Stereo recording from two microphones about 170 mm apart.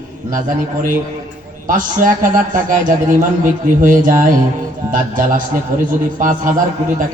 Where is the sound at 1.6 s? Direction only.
55° right (ahead or behind).